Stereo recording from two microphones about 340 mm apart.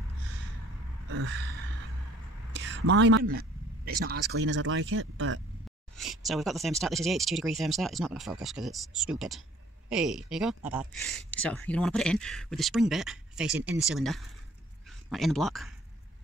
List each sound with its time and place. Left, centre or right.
1.1 s gasp: right
2.5 s speech: right
5.9 s speech: centre